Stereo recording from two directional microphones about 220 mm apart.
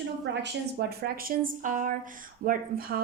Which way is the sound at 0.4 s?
45° right (ahead or behind).